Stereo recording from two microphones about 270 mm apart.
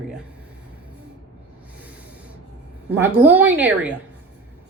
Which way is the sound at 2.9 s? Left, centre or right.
Centre.